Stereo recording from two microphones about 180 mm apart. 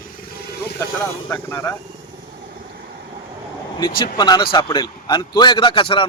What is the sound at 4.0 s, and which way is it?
A man's voice, 25° left (ahead or behind).